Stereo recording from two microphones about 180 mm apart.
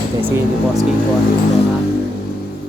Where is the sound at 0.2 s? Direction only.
10° right (ahead or behind).